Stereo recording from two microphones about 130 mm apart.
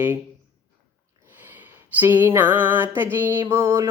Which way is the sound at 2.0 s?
15° right (ahead or behind).